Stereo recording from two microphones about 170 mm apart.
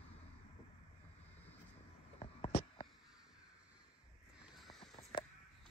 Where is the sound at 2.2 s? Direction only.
30° left (ahead or behind).